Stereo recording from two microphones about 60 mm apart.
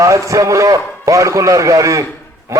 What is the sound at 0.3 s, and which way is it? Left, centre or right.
A man's voice, right.